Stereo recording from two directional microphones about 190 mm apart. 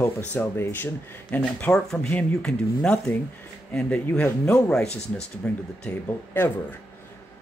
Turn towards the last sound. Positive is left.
turn(degrees=10)  # may be behind; listen again after turning